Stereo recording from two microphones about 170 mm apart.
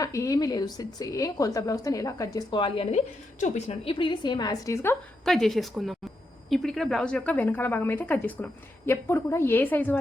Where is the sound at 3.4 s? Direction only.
40° left (ahead or behind); by 4.9 s 20° left (ahead or behind).